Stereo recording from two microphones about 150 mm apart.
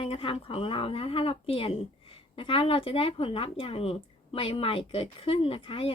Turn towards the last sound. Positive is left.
turn(degrees=35)  # may be behind; listen again after turning